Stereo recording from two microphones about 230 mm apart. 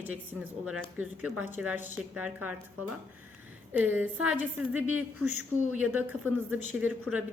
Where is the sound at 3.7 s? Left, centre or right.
Centre.